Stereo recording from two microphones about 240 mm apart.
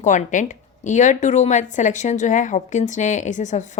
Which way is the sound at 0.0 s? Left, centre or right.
Left.